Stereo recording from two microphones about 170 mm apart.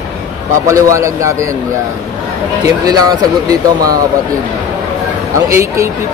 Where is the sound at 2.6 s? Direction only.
20° right (ahead or behind).